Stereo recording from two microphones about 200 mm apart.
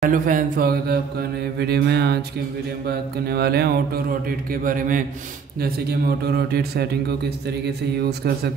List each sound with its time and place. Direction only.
0.0 s speech: 40° right (ahead or behind)
1.6 s music: 55° right (ahead or behind)
2.9 s speech: 55° right (ahead or behind)